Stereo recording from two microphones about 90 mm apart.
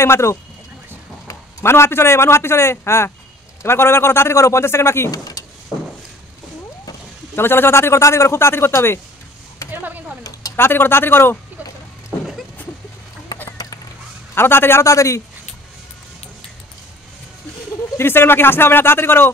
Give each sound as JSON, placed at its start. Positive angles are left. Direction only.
{"t": 0.0, "sound": "a man's voice", "side_deg": 30}
{"t": 5.1, "sound": "speech", "side_deg": 45}
{"t": 7.3, "sound": "a man's voice", "side_deg": 25}
{"t": 9.7, "sound": "a sound", "side_deg": -20}
{"t": 10.5, "sound": "a man's voice", "side_deg": 25}
{"t": 13.5, "sound": "a sound", "side_deg": 40}
{"t": 14.3, "sound": "a man's voice", "side_deg": 25}
{"t": 17.9, "sound": "a man's voice", "side_deg": 25}